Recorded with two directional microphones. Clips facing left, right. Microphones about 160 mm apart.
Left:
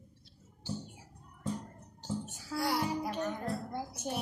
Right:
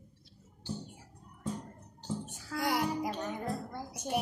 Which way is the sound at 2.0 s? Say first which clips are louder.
Even; 5° left (ahead or behind).